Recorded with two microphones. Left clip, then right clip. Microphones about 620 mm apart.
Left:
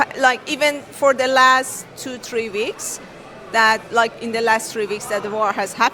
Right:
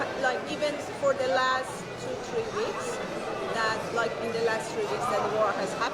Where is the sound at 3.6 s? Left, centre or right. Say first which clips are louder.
Left 15 dB; left.